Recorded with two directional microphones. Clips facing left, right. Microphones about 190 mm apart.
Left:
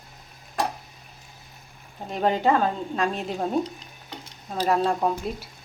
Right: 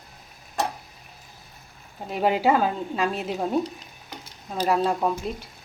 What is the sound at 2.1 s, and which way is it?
A woman's voice, 5° right (ahead or behind).